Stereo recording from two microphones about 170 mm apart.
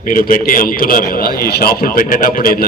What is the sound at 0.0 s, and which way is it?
A man's voice, 55° left (ahead or behind).